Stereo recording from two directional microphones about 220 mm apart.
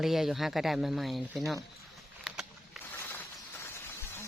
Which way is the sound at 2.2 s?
Centre (ahead or behind).